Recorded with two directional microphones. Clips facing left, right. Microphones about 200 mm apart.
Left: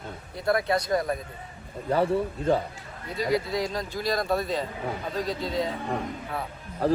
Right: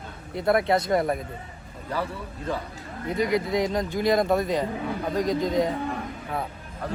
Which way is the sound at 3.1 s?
20° right (ahead or behind).